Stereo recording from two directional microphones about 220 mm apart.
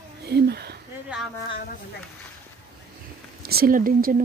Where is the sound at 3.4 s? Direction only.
45° right (ahead or behind).